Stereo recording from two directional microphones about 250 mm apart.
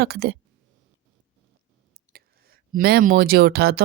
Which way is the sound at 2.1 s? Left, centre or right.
Right.